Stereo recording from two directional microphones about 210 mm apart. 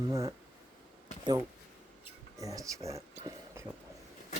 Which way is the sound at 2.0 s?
15° right (ahead or behind).